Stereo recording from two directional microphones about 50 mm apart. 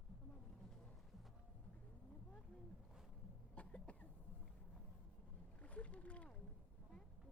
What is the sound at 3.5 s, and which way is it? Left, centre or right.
Cough, left.